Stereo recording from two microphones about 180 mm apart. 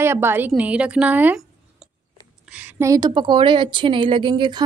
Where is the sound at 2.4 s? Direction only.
10° right (ahead or behind).